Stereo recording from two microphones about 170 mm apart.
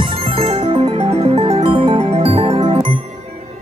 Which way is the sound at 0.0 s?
30° right (ahead or behind).